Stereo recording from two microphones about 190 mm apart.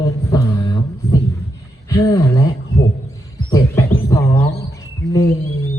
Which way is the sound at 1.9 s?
20° left (ahead or behind).